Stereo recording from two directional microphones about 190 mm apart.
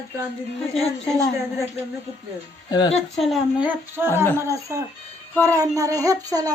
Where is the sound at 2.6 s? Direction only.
20° left (ahead or behind).